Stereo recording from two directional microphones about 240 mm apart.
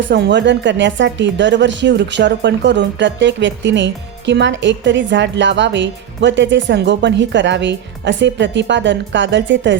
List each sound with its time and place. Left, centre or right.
0.0 s speech: right